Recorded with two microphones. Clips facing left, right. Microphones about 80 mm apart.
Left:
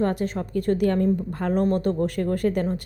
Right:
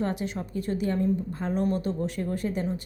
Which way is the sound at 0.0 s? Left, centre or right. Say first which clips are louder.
Left 5 dB; left.